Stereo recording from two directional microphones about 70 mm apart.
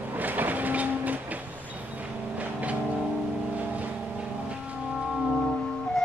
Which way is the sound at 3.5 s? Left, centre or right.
Right.